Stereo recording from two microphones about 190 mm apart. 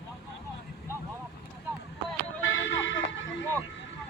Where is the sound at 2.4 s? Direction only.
85° left.